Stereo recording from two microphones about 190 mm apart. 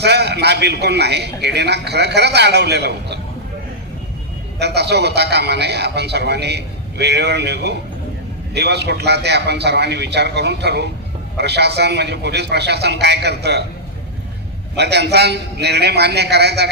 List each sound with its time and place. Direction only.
0.0 s a man's voice: 60° right (ahead or behind)
4.6 s a man's voice: 60° right (ahead or behind)
14.8 s a man's voice: 60° right (ahead or behind)